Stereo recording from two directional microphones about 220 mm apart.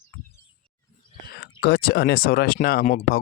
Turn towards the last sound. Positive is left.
turn(degrees=40)  # may be behind; listen again after turning